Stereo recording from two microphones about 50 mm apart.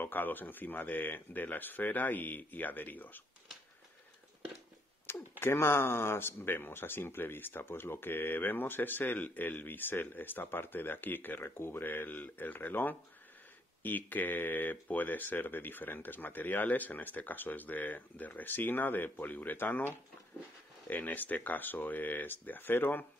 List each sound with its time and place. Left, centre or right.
0.0 s speech: left
5.1 s a sound: left
5.4 s speech: left